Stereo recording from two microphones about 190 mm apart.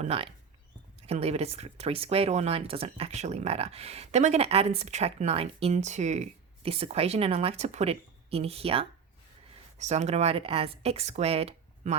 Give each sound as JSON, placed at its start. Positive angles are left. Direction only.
{"t": 0.0, "sound": "speech", "side_deg": -30}